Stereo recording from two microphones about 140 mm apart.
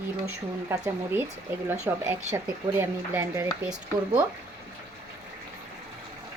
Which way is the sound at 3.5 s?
5° right (ahead or behind).